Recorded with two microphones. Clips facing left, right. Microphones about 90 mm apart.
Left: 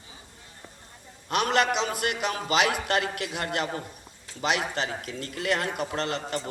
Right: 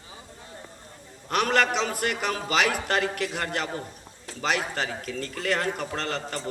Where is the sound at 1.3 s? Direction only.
20° left (ahead or behind).